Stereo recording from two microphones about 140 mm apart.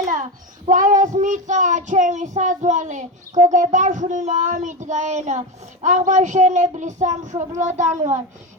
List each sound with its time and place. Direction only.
0.1 s child singing: 65° right (ahead or behind)